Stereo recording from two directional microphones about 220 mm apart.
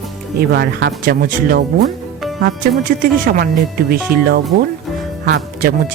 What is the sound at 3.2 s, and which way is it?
Speech, 40° right (ahead or behind).